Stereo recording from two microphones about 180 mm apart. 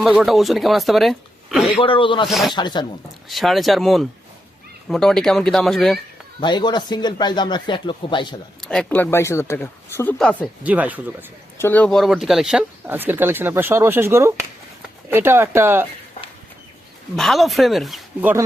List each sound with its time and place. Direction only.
0.0 s speech: centre (ahead or behind)
1.8 s speech: 30° left (ahead or behind)
2.2 s speech: centre (ahead or behind)
2.6 s speech: 25° left (ahead or behind)
3.2 s speech: centre (ahead or behind)
6.4 s speech: 25° left (ahead or behind)
8.6 s speech: 5° left (ahead or behind)
10.6 s speech: 10° right (ahead or behind)
11.5 s speech: 10° left (ahead or behind); by 15.9 s 15° right (ahead or behind)
17.2 s speech: centre (ahead or behind)